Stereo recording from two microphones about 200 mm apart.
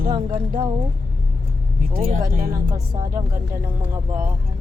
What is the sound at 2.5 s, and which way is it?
Speech, 15° right (ahead or behind).